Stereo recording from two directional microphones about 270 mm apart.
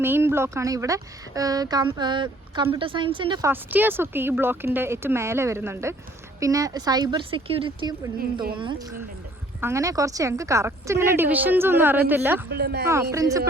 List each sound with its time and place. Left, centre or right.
0.0 s speech: centre
12.5 s speech: right
12.9 s speech: centre